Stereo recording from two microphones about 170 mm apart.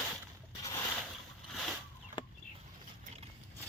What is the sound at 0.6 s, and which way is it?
Pulleys, 20° left (ahead or behind).